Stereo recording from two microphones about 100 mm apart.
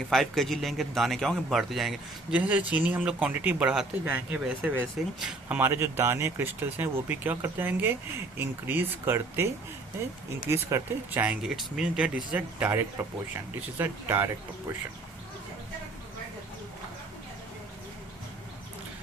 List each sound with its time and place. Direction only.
0.1 s speech: centre (ahead or behind)
2.3 s speech: 15° right (ahead or behind)
10.5 s speech: 30° right (ahead or behind)
11.2 s speech: 15° right (ahead or behind)